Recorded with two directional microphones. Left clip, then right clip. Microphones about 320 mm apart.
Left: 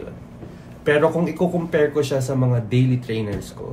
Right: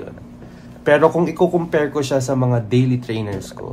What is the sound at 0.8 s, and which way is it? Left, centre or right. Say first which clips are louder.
Speech: right 4 dB; right.